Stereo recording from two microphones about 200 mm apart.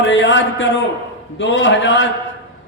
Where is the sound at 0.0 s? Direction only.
65° left (ahead or behind).